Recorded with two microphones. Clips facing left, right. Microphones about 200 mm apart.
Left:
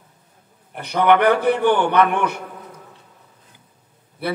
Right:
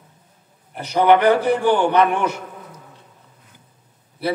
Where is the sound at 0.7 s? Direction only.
60° left (ahead or behind).